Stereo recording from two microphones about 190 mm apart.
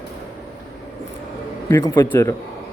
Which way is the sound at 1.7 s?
15° left (ahead or behind).